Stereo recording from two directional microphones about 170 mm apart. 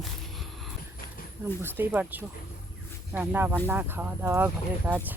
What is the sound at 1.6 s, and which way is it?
Speech, 10° right (ahead or behind).